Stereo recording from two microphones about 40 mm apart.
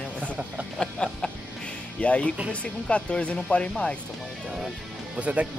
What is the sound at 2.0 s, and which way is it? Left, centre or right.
Speech, left.